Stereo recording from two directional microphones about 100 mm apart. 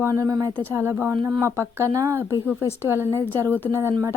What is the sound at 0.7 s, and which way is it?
Speech, 25° right (ahead or behind).